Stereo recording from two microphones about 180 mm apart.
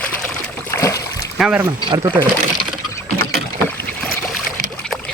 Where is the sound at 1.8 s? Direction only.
20° right (ahead or behind).